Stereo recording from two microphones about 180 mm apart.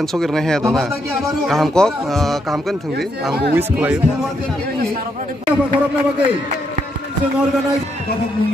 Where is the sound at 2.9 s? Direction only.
65° right (ahead or behind).